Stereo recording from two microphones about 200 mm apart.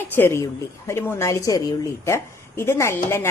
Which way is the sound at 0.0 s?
10° left (ahead or behind).